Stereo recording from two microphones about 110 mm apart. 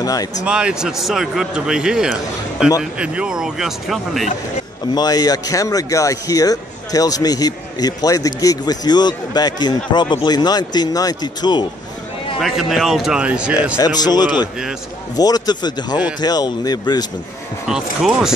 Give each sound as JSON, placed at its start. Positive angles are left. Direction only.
{"t": 0.0, "sound": "speech", "side_deg": 35}
{"t": 0.5, "sound": "speech", "side_deg": -10}
{"t": 4.9, "sound": "speech", "side_deg": 35}
{"t": 12.4, "sound": "speech", "side_deg": 0}
{"t": 13.7, "sound": "speech", "side_deg": 35}
{"t": 17.6, "sound": "speech", "side_deg": -5}